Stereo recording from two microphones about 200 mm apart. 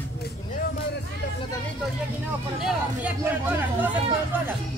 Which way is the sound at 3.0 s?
5° right (ahead or behind).